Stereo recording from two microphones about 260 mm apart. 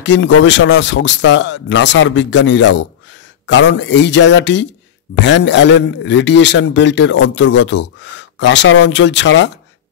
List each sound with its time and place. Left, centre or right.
0.0 s a man's voice: left